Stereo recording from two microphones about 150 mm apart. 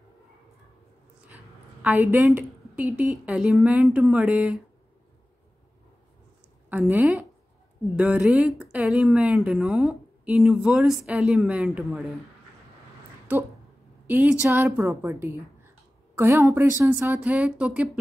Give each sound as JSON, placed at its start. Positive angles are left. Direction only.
{"t": 1.3, "sound": "a sound", "side_deg": -10}
{"t": 3.3, "sound": "speech", "side_deg": -5}
{"t": 6.7, "sound": "speech", "side_deg": -10}
{"t": 13.3, "sound": "speech", "side_deg": -10}